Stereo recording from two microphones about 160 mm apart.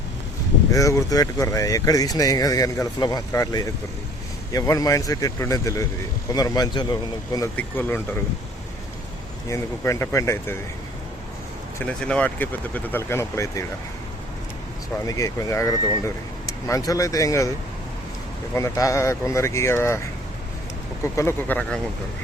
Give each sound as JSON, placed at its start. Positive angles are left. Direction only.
{"t": 0.7, "sound": "speech", "side_deg": 20}
{"t": 9.5, "sound": "speech", "side_deg": 20}
{"t": 11.8, "sound": "speech", "side_deg": 5}
{"t": 15.0, "sound": "speech", "side_deg": 20}
{"t": 18.5, "sound": "speech", "side_deg": 20}
{"t": 21.0, "sound": "speech", "side_deg": 15}